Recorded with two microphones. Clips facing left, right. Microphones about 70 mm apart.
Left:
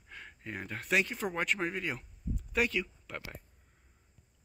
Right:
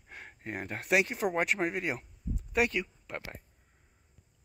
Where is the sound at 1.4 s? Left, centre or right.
Centre.